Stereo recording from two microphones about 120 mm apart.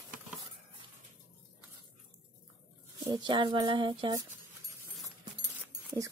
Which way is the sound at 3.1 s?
40° right (ahead or behind).